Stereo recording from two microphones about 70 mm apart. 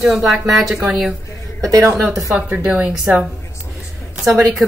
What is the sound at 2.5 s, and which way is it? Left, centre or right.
Speech, right.